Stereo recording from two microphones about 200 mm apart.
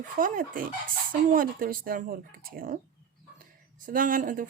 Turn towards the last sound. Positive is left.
turn(degrees=-40)  # may be behind; listen again after turning